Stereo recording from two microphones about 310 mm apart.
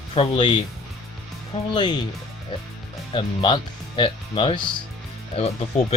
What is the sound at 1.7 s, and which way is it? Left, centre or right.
Speech, centre.